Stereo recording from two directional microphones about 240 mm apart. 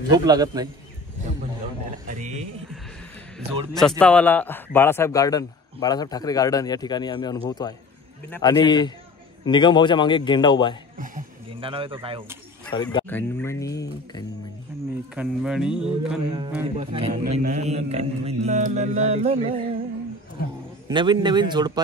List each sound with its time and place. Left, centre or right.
0.1 s a man's voice: centre
2.0 s a sound: right
4.0 s a man's voice: centre
11.5 s mantra: right
12.7 s a man's voice: centre
14.7 s a sound: centre
15.1 s speech: centre
16.7 s mantra: right
17.1 s mantra: right
20.9 s mantra: centre